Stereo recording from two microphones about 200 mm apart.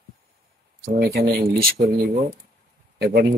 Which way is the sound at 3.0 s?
55° right (ahead or behind).